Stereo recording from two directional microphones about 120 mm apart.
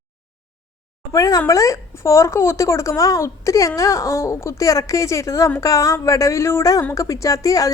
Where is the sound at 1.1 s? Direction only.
30° left (ahead or behind).